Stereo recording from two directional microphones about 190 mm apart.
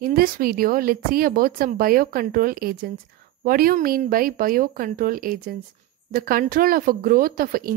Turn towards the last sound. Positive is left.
turn(degrees=-50)  # may be behind; listen again after turning